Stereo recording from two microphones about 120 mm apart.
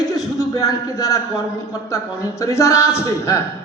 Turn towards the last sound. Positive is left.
turn(degrees=25)  # may be behind; listen again after turning